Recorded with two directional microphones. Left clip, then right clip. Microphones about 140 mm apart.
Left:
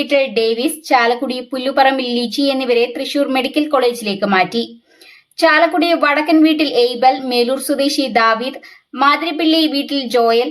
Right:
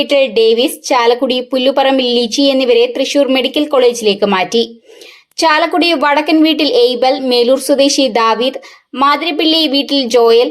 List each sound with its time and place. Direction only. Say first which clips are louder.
0.0 s speech: right 5 dB; 20° right (ahead or behind)